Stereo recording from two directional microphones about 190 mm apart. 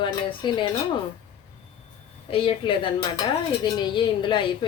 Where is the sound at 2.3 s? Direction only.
25° left (ahead or behind).